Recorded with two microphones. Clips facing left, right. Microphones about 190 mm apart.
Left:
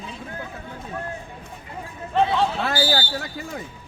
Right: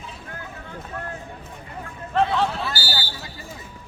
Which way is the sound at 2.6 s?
75° left (ahead or behind).